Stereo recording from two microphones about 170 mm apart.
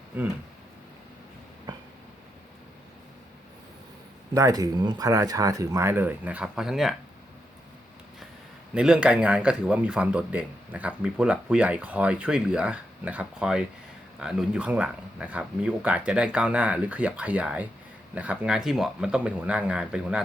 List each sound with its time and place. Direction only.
0.1 s speech: 10° right (ahead or behind)
4.4 s speech: 20° right (ahead or behind); by 6.9 s centre (ahead or behind)
8.7 s speech: 5° right (ahead or behind)